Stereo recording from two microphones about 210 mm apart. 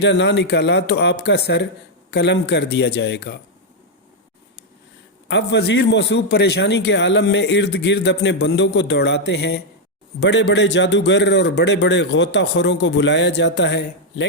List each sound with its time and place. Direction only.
0.0 s a man's voice: 55° left (ahead or behind)
5.3 s a man's voice: 55° left (ahead or behind)